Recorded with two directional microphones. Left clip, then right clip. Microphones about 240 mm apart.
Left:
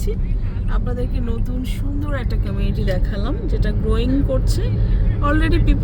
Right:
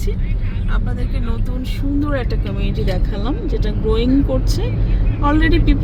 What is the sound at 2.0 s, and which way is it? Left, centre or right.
Speech, centre.